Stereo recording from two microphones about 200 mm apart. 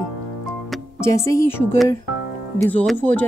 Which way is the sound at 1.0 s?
15° left (ahead or behind).